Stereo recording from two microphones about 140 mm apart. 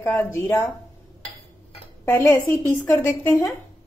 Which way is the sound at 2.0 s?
15° left (ahead or behind).